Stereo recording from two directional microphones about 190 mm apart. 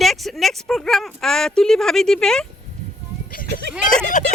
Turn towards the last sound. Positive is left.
turn(degrees=40)  # may be behind; listen again after turning